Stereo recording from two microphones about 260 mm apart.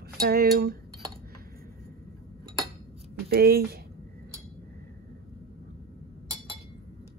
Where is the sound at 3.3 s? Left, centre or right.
Right.